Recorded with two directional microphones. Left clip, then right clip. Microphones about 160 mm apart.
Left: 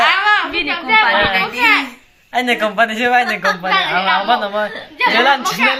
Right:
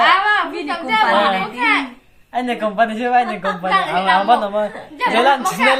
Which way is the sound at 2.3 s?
25° left (ahead or behind).